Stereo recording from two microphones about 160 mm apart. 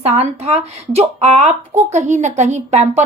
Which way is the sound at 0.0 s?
40° right (ahead or behind).